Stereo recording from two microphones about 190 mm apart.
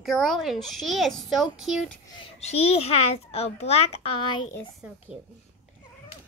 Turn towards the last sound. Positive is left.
turn(degrees=30)  # may be behind; listen again after turning